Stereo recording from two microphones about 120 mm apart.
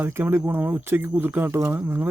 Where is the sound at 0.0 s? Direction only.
20° right (ahead or behind).